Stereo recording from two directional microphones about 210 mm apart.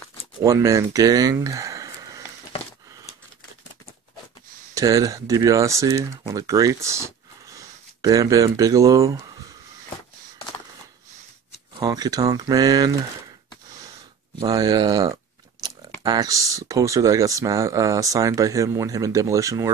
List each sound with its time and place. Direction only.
0.4 s speech: 15° right (ahead or behind)
4.7 s speech: 15° right (ahead or behind)
11.7 s speech: 20° right (ahead or behind)
14.4 s speech: 20° right (ahead or behind)
15.6 s a sound: 15° right (ahead or behind)
16.0 s speech: 20° right (ahead or behind)